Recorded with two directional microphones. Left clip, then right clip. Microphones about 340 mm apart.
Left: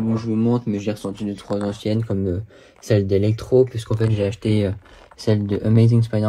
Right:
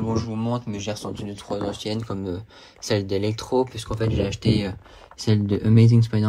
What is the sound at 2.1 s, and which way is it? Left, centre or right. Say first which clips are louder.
Speech: left 6 dB; left.